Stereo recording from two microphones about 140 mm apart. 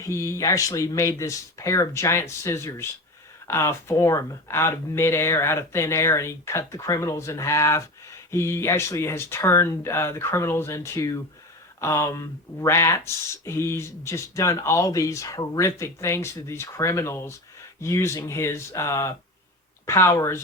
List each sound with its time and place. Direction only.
0.0 s speech: 20° left (ahead or behind)